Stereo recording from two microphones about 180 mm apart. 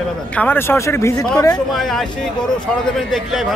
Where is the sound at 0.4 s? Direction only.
10° left (ahead or behind).